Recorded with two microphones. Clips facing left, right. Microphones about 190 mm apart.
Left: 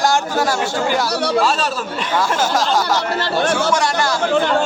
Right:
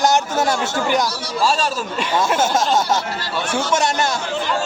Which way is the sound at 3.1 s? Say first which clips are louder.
Left 7 dB; 65° left (ahead or behind).